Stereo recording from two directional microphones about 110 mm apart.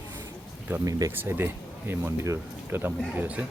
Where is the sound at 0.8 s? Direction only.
30° right (ahead or behind).